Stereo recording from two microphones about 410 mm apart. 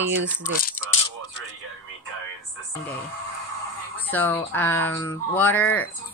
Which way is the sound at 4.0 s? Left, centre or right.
Centre.